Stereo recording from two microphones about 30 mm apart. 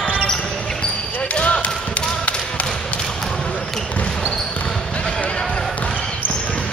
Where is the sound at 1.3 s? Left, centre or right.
Left.